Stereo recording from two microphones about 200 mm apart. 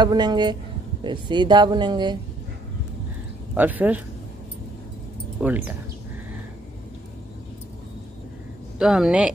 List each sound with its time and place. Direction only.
0.0 s speech: 20° right (ahead or behind)
3.5 s speech: 10° right (ahead or behind)
5.4 s speech: 10° right (ahead or behind)
8.7 s speech: 5° right (ahead or behind)